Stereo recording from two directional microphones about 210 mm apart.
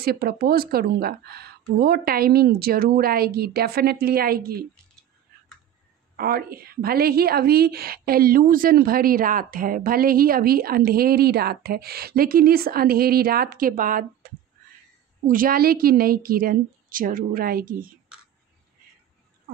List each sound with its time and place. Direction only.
0.0 s a woman's voice: 45° right (ahead or behind)
6.1 s a woman's voice: 45° right (ahead or behind)